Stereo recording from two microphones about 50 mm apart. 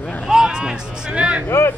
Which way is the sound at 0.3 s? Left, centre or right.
Centre.